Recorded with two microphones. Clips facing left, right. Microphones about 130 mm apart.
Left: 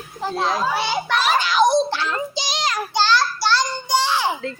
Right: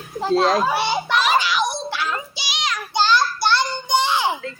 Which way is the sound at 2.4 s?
40° left (ahead or behind).